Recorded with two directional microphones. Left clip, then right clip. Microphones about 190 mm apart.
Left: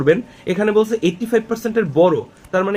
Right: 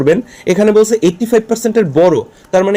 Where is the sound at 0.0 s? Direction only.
40° right (ahead or behind).